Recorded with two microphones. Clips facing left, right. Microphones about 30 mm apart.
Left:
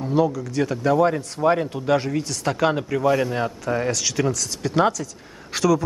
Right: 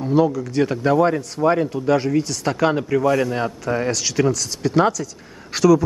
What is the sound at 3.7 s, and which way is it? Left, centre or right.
Speech, centre.